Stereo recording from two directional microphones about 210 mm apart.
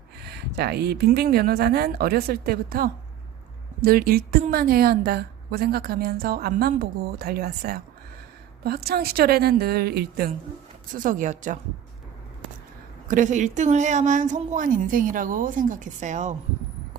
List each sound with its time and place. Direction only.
0.2 s a woman's voice: 50° right (ahead or behind)
13.1 s speech: 35° right (ahead or behind)